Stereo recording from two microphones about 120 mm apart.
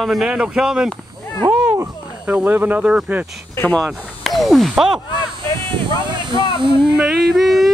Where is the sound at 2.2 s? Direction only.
10° right (ahead or behind).